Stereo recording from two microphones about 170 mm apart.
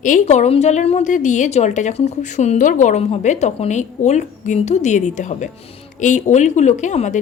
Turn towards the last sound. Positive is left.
turn(degrees=45)  # may be behind; listen again after turning